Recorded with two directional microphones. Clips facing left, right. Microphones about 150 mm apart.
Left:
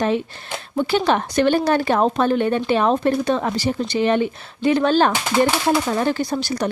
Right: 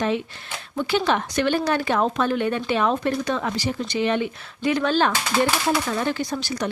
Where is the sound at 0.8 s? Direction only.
35° left (ahead or behind).